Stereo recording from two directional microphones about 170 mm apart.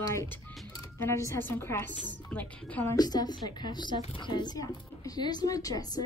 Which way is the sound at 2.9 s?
25° left (ahead or behind).